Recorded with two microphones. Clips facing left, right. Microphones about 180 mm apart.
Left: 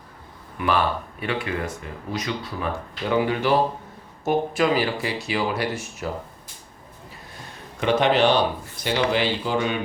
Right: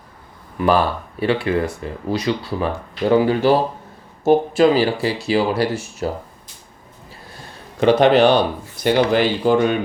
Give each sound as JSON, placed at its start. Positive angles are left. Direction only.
{"t": 0.6, "sound": "speech", "side_deg": -35}
{"t": 7.8, "sound": "a man's voice", "side_deg": -35}
{"t": 8.8, "sound": "speech", "side_deg": -45}